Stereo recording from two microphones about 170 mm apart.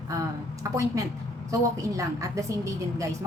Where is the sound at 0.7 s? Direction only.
20° right (ahead or behind).